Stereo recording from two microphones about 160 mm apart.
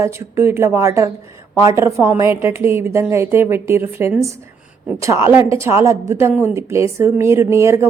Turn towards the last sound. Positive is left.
turn(degrees=-15)  # may be behind; listen again after turning